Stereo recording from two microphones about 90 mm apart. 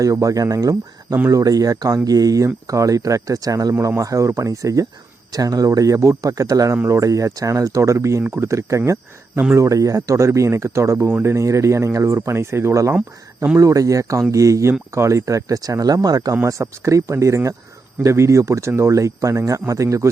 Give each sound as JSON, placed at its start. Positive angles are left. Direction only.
{"t": 0.0, "sound": "speech", "side_deg": -35}
{"t": 16.3, "sound": "speech", "side_deg": -30}